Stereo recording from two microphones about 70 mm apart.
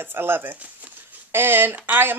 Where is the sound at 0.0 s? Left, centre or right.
Right.